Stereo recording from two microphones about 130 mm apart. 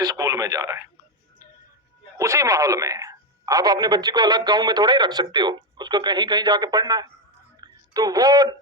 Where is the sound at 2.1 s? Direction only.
25° right (ahead or behind).